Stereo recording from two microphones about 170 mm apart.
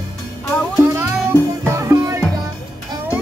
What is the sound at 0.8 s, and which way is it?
Music, 15° right (ahead or behind).